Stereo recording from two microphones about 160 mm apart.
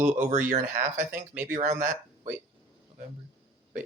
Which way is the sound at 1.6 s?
45° right (ahead or behind).